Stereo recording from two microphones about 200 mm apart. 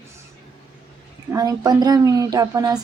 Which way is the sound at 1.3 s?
20° right (ahead or behind).